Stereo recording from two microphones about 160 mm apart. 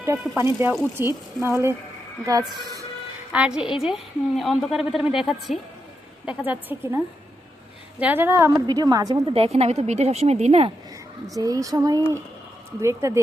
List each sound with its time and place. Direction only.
0.0 s speech: 15° right (ahead or behind)
3.3 s a woman's voice: 5° right (ahead or behind); by 9.2 s 25° right (ahead or behind)
9.3 s speech: 40° right (ahead or behind)
11.3 s speech: 20° right (ahead or behind)